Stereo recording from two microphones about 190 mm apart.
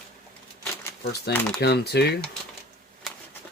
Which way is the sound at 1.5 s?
60° left (ahead or behind).